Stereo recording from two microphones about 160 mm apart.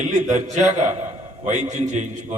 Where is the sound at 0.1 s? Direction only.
45° right (ahead or behind).